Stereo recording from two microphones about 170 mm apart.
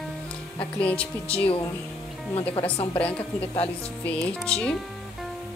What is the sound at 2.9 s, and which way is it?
Speech, 10° left (ahead or behind).